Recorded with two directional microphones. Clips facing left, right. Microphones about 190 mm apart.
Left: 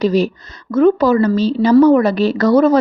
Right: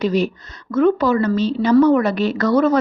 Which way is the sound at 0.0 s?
35° left (ahead or behind).